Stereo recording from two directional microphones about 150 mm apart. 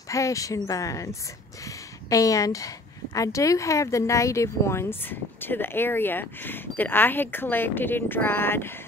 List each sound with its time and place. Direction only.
0.1 s speech: 20° left (ahead or behind)